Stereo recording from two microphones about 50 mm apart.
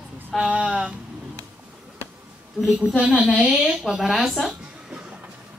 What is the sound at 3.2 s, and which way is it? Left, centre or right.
Speech, right.